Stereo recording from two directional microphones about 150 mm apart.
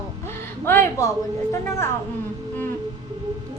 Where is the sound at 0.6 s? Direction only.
15° left (ahead or behind).